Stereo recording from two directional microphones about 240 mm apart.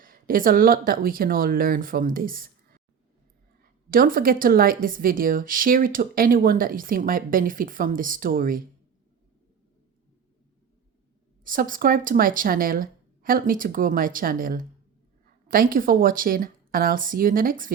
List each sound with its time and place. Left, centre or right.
0.0 s a woman's voice: right
11.4 s a woman's voice: right